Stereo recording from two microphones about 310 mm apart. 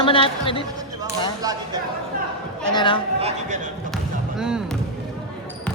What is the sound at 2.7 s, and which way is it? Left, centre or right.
Speech, centre.